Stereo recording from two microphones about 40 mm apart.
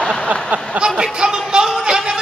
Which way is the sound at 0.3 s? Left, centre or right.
Right.